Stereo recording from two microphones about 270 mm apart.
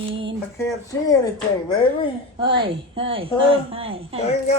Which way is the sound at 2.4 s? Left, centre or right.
Centre.